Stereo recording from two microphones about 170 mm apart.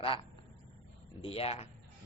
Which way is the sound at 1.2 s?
35° left (ahead or behind).